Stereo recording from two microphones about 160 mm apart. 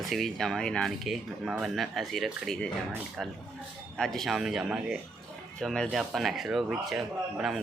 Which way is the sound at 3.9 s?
Centre (ahead or behind).